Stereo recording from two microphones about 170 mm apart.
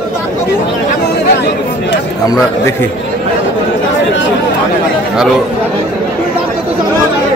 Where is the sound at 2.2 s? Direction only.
20° left (ahead or behind).